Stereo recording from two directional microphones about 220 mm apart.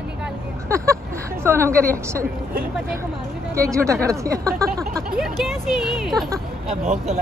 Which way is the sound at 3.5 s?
15° right (ahead or behind).